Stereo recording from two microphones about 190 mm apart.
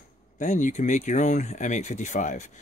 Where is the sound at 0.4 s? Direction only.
40° left (ahead or behind).